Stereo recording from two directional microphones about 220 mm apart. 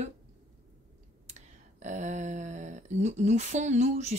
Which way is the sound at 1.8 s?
35° right (ahead or behind).